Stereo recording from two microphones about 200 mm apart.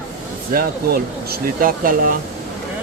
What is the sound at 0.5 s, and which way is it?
Speech, 50° right (ahead or behind).